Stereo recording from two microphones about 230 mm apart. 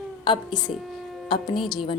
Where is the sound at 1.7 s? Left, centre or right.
Left.